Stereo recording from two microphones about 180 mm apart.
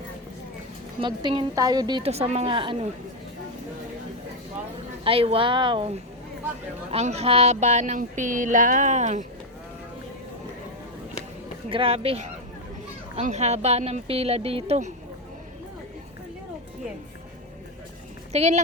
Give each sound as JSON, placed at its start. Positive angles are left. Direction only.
{"t": 0.9, "sound": "a woman's voice", "side_deg": -25}
{"t": 5.0, "sound": "a woman's voice", "side_deg": -30}
{"t": 11.7, "sound": "speech", "side_deg": -30}
{"t": 18.3, "sound": "speech", "side_deg": -40}